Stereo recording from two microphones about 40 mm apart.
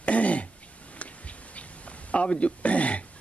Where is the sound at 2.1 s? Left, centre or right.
Left.